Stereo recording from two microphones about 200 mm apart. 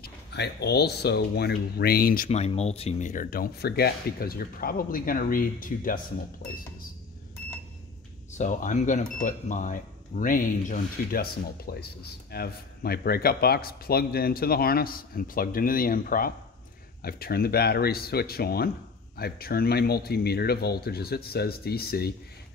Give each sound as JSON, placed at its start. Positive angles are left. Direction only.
{"t": 0.0, "sound": "speech", "side_deg": 55}
{"t": 8.4, "sound": "speech", "side_deg": 40}